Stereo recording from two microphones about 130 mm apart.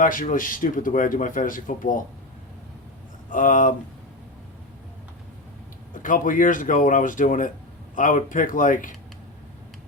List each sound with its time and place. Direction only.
0.0 s speech: 90° left
3.2 s speech: 90° left
5.9 s speech: 90° left